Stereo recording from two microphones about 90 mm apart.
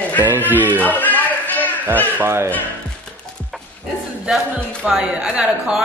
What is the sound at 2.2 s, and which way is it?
Speech, 30° right (ahead or behind).